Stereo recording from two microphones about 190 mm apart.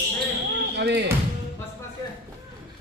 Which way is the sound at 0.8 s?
60° right (ahead or behind).